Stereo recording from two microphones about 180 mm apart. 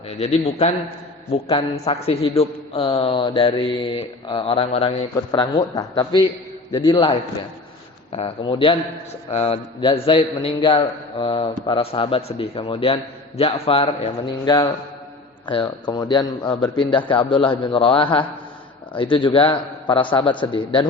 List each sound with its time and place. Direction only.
0.2 s a man's voice: 35° left (ahead or behind)
5.3 s a man's voice: 20° left (ahead or behind)